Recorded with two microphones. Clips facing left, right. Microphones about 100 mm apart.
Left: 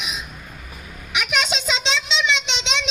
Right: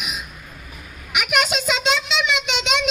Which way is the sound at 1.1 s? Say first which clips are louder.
Right 2 dB; 10° right (ahead or behind).